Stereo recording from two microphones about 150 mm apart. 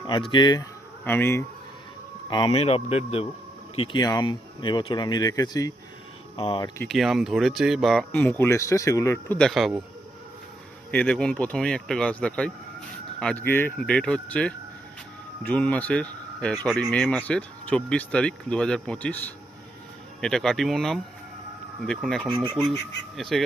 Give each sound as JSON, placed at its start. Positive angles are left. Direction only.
{"t": 0.0, "sound": "speech", "side_deg": 30}
{"t": 1.0, "sound": "speech", "side_deg": 15}
{"t": 2.3, "sound": "speech", "side_deg": 35}
{"t": 3.8, "sound": "speech", "side_deg": 30}
{"t": 6.3, "sound": "speech", "side_deg": 35}
{"t": 6.8, "sound": "speech", "side_deg": 0}
{"t": 9.4, "sound": "speech", "side_deg": 0}
{"t": 10.9, "sound": "speech", "side_deg": 10}
{"t": 20.2, "sound": "speech", "side_deg": 5}